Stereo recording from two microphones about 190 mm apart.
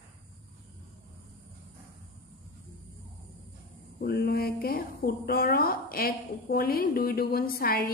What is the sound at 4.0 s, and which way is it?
A woman's voice, 55° left (ahead or behind).